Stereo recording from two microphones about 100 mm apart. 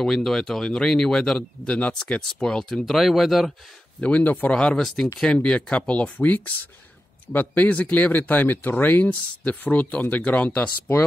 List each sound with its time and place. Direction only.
0.0 s speech: 5° left (ahead or behind)
4.0 s speech: 15° left (ahead or behind)